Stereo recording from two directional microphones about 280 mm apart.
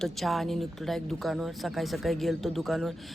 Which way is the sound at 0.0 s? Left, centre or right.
Centre.